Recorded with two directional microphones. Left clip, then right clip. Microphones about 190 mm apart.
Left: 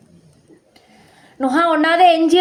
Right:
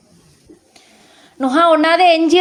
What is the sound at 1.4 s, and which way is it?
Speech, 25° right (ahead or behind).